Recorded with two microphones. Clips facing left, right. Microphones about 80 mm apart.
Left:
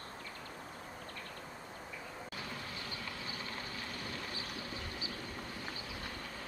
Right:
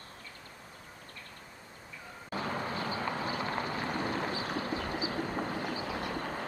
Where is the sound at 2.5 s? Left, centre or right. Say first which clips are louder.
Right 10 dB; right.